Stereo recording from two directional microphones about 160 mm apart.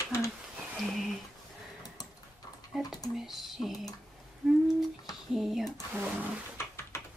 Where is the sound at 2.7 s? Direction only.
Centre (ahead or behind).